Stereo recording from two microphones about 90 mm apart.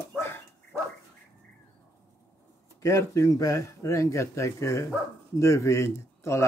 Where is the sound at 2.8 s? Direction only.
35° left (ahead or behind).